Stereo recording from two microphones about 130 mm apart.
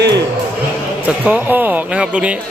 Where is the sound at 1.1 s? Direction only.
10° right (ahead or behind).